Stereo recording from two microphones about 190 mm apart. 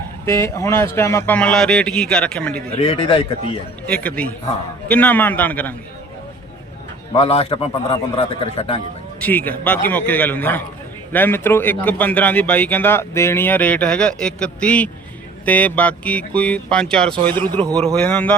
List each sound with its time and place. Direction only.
0.3 s a man's voice: 15° left (ahead or behind)
2.7 s a man's voice: 30° left (ahead or behind)
3.8 s a man's voice: 5° left (ahead or behind)
7.1 s a man's voice: 30° left (ahead or behind)
9.2 s a man's voice: 10° left (ahead or behind)